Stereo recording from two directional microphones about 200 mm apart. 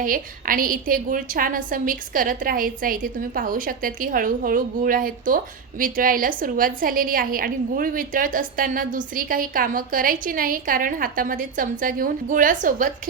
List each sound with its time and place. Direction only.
0.0 s a woman's voice: 45° right (ahead or behind)